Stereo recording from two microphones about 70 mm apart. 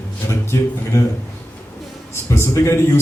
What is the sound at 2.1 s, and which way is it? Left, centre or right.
Speech, left.